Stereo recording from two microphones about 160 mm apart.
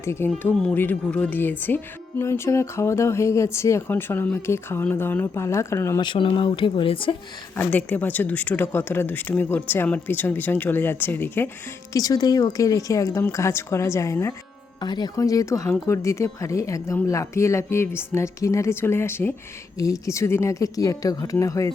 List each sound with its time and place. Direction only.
0.0 s speech: 15° left (ahead or behind)
6.1 s speech: 30° left (ahead or behind)
7.5 s speech: 10° left (ahead or behind)
11.9 s speech: 20° left (ahead or behind)